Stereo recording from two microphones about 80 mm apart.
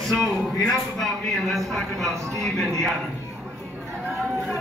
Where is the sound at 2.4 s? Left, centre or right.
Centre.